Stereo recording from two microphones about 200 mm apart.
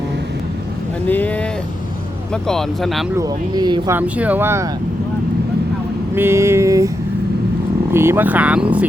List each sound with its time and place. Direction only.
1.0 s speech: 10° left (ahead or behind)
3.2 s speech: 20° right (ahead or behind)
3.9 s speech: 5° right (ahead or behind)
6.1 s speech: 15° right (ahead or behind)
7.9 s speech: 10° right (ahead or behind)